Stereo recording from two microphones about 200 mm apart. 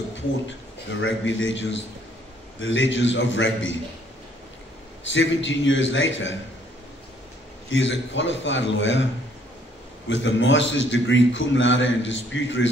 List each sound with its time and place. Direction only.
1.0 s a man's voice: 70° left (ahead or behind)
5.0 s a man's voice: 65° left (ahead or behind)
7.7 s a man's voice: 70° left (ahead or behind)
10.0 s a man's voice: 70° left (ahead or behind)